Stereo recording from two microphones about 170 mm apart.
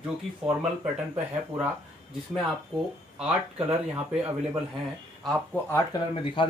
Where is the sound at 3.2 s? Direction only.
5° right (ahead or behind).